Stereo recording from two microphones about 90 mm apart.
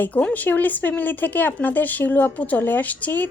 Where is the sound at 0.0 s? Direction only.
15° left (ahead or behind).